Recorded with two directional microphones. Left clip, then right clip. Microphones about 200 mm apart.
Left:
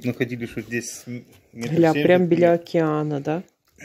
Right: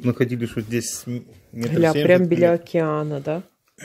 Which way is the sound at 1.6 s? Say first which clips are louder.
Even; 5° left (ahead or behind).